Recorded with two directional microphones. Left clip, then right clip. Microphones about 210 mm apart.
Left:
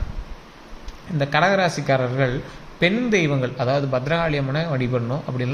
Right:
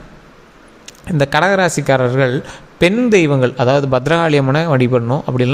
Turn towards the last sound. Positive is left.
turn(degrees=-45)  # may be behind; listen again after turning